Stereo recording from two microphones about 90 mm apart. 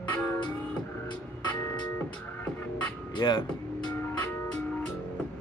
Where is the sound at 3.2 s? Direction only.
50° left (ahead or behind).